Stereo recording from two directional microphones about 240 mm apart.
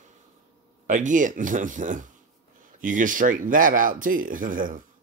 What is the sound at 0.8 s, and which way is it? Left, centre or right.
Speech, right.